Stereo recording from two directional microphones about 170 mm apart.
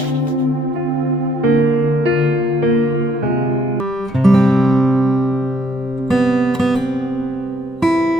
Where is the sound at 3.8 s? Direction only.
Centre (ahead or behind).